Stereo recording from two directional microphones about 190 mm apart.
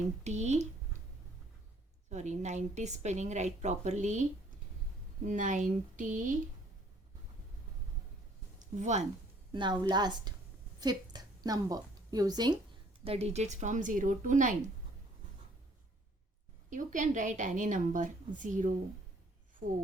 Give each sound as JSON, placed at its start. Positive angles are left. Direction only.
{"t": 0.3, "sound": "speech", "side_deg": -35}
{"t": 2.0, "sound": "a woman's voice", "side_deg": -40}
{"t": 8.5, "sound": "a sound", "side_deg": -40}
{"t": 9.5, "sound": "a woman's voice", "side_deg": -25}
{"t": 13.1, "sound": "a woman's voice", "side_deg": -35}
{"t": 16.6, "sound": "a woman's voice", "side_deg": -40}